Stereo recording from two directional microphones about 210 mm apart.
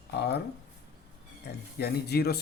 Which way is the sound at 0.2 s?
50° left (ahead or behind).